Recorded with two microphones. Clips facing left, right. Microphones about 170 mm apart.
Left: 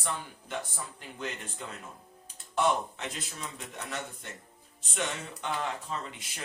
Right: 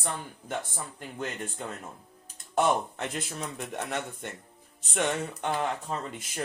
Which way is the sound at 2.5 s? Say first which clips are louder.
Right 3 dB; 55° right (ahead or behind).